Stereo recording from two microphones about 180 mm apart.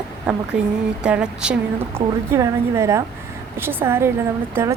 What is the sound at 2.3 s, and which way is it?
A woman's voice, 15° right (ahead or behind).